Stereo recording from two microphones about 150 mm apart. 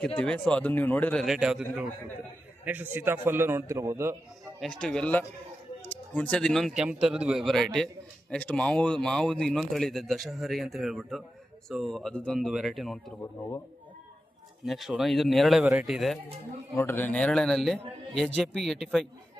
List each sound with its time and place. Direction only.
0.5 s speech: 10° left (ahead or behind)
1.2 s a man's voice: centre (ahead or behind); by 4.2 s 20° right (ahead or behind)
4.6 s speech: 5° left (ahead or behind)
14.6 s speech: centre (ahead or behind)
16.7 s speech: 15° left (ahead or behind)